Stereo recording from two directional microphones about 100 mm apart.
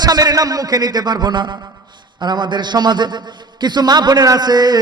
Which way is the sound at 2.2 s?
45° right (ahead or behind).